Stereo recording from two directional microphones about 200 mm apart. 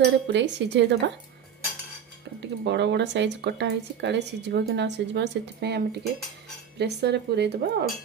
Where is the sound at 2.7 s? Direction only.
60° right (ahead or behind).